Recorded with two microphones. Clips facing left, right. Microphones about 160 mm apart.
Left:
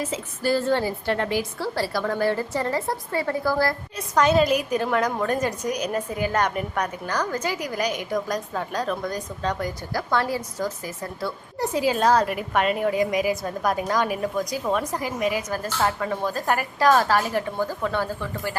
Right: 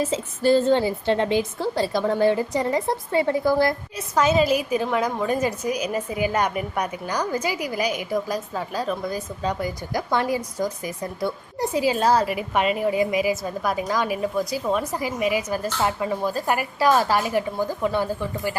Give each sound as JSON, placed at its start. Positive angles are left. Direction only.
{"t": 0.0, "sound": "a woman's voice", "side_deg": -25}
{"t": 3.9, "sound": "a woman's voice", "side_deg": -5}